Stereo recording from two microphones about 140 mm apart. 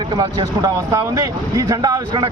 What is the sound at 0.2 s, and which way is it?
A man's voice, 25° right (ahead or behind).